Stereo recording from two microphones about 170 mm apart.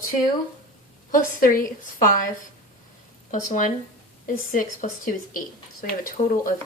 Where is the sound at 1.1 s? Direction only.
55° left (ahead or behind).